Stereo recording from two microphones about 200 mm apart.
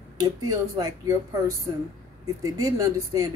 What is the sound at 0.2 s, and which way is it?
Speech, 20° right (ahead or behind).